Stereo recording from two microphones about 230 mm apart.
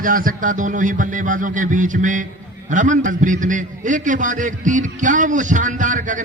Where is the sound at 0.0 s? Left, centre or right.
Right.